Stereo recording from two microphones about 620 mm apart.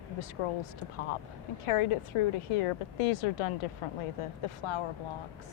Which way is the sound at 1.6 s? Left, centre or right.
Left.